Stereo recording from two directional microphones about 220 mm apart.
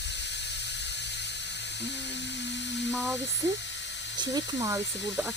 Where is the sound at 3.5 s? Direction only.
55° left (ahead or behind).